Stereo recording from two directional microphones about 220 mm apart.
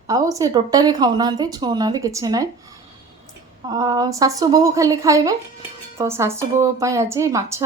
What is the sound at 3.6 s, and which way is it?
Speech, 15° right (ahead or behind).